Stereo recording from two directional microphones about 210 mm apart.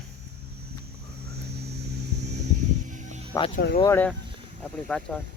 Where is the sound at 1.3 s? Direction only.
50° right (ahead or behind).